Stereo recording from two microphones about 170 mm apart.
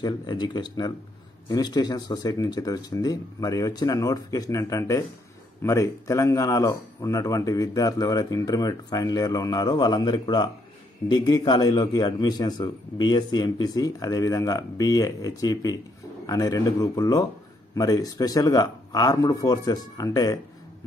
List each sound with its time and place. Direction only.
0.0 s speech: 25° left (ahead or behind)